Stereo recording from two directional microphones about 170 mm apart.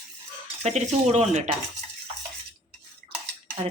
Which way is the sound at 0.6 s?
40° right (ahead or behind).